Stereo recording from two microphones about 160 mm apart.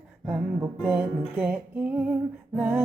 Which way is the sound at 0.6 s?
10° right (ahead or behind).